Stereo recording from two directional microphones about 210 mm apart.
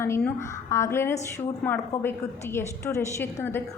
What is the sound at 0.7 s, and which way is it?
Speech, 15° left (ahead or behind).